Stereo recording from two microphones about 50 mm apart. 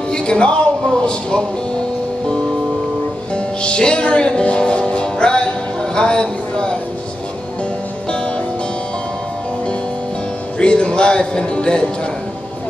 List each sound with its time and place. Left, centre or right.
0.1 s speech: centre
3.3 s music: centre
10.6 s a man's voice: centre